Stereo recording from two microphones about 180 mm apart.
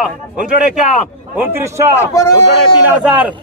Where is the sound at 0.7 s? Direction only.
45° left (ahead or behind).